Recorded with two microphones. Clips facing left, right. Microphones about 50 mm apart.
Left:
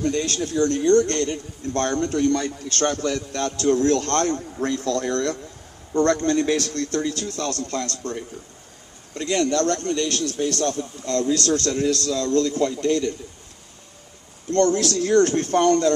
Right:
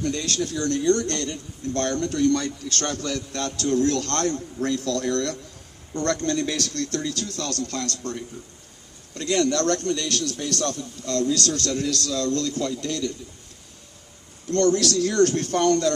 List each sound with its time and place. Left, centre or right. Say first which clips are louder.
0.0 s a man's voice: left 3 dB; left
14.5 s speech: left 1 dB; left